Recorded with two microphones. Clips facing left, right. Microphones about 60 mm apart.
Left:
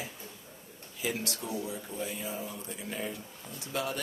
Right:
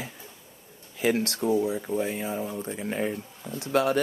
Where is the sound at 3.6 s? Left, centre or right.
Right.